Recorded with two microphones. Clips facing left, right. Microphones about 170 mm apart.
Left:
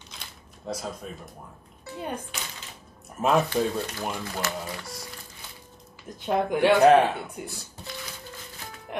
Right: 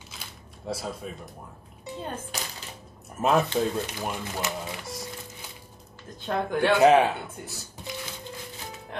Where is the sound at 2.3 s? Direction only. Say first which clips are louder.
Right 3 dB; 40° right (ahead or behind).